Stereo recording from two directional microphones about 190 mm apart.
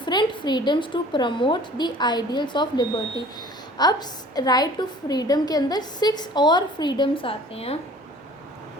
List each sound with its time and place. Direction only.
0.0 s a woman's voice: 25° left (ahead or behind)